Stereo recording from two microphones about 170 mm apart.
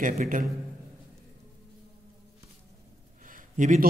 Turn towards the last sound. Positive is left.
turn(degrees=-45)  # may be behind; listen again after turning